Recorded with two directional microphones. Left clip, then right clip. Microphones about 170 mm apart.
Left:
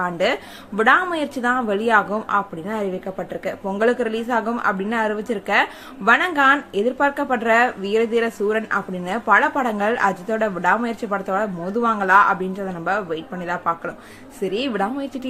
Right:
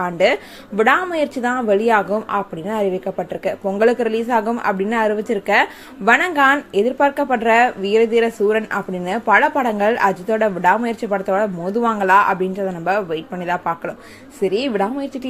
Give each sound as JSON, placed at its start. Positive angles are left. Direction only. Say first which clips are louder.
{"t": 0.0, "sound": "speech", "louder": "right 4 dB", "side_deg": -15}